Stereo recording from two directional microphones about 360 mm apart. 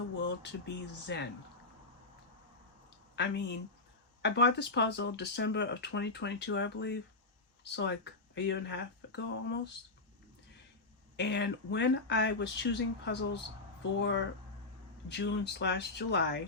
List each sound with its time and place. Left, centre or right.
0.2 s speech: left
3.2 s speech: left
11.2 s speech: left